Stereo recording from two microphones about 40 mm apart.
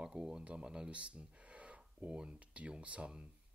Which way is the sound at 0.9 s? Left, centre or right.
Right.